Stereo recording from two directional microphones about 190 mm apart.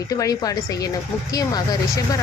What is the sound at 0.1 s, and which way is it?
A woman's voice, 20° left (ahead or behind).